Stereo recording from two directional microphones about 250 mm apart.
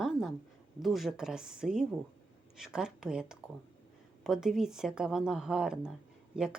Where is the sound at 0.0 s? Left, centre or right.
Centre.